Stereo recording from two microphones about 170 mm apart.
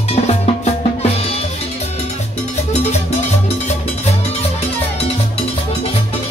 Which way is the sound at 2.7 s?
40° left (ahead or behind).